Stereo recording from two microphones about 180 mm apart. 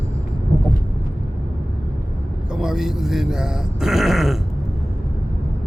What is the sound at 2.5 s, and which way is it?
Speech, 5° right (ahead or behind).